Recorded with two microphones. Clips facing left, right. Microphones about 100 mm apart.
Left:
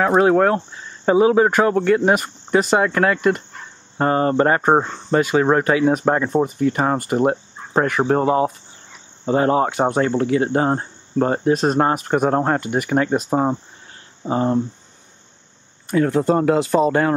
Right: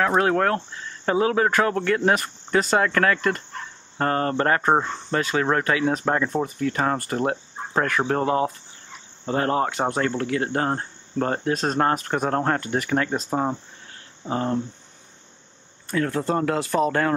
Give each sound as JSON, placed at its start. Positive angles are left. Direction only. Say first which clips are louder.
{"t": 0.0, "sound": "speech", "louder": "left 5 dB", "side_deg": 15}
{"t": 14.2, "sound": "hum", "louder": "left 6 dB", "side_deg": 20}
{"t": 15.9, "sound": "speech", "louder": "left 6 dB", "side_deg": 15}